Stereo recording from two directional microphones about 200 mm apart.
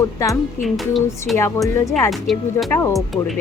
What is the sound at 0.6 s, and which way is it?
Speech, centre (ahead or behind).